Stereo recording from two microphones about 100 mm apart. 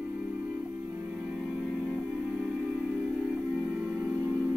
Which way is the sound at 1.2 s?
5° right (ahead or behind).